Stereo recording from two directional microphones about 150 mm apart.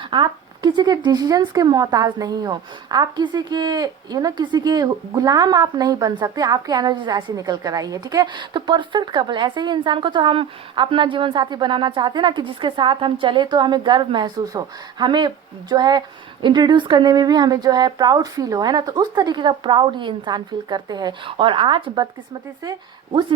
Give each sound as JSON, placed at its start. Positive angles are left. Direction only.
{"t": 0.1, "sound": "speech", "side_deg": -30}